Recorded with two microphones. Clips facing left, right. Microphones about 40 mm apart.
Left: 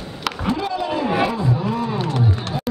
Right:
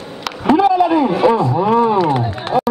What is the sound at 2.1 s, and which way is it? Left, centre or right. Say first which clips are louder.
Run: right 5 dB; right.